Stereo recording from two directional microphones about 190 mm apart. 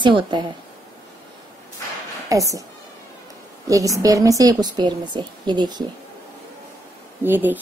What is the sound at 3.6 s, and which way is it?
A woman's voice, 15° right (ahead or behind).